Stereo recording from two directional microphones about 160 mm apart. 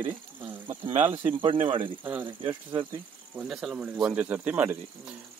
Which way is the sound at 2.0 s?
10° right (ahead or behind).